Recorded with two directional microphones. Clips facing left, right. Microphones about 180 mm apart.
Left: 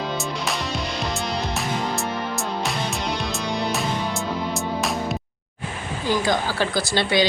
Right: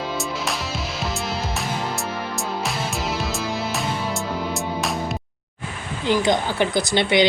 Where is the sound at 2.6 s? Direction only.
Centre (ahead or behind).